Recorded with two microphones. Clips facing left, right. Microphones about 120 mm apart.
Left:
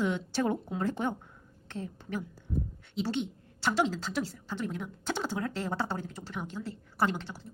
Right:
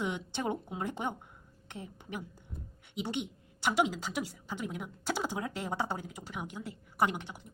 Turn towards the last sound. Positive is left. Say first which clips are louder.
# left 1 dB
turn(degrees=-15)  # may be behind; listen again after turning